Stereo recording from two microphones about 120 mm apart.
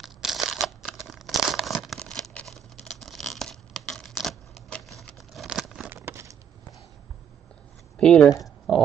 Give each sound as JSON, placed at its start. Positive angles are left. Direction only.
{"t": 0.0, "sound": "crumpling", "side_deg": 0}
{"t": 5.9, "sound": "a sound", "side_deg": -20}
{"t": 8.0, "sound": "speech", "side_deg": 10}